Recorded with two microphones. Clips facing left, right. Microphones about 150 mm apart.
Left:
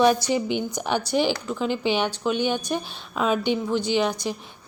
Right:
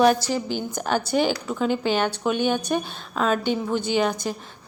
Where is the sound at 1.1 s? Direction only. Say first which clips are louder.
Right 1 dB; centre (ahead or behind).